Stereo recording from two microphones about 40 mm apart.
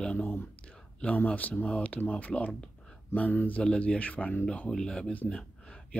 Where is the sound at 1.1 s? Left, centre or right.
Left.